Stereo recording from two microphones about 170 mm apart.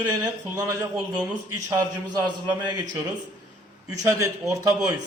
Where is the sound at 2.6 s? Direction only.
25° right (ahead or behind).